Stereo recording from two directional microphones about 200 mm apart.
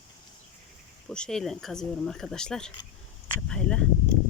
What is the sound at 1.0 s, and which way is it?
Speech, 5° left (ahead or behind).